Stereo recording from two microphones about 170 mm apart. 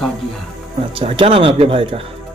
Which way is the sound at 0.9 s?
30° right (ahead or behind).